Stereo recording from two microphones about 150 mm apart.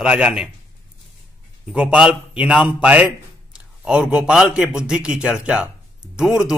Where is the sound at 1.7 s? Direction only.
5° right (ahead or behind).